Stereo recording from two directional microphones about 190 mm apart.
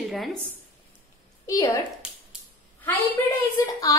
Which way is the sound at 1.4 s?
15° left (ahead or behind).